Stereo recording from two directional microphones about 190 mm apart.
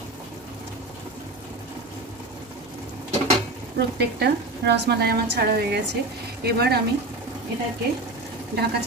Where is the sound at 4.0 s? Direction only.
60° right (ahead or behind).